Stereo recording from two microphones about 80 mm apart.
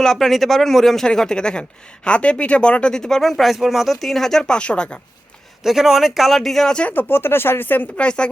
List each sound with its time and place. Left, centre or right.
0.0 s speech: centre
5.6 s speech: centre
6.8 s speech: left
8.0 s speech: centre